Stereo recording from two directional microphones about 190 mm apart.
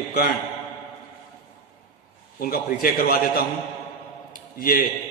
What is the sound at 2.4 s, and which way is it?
A man's voice, 50° left (ahead or behind).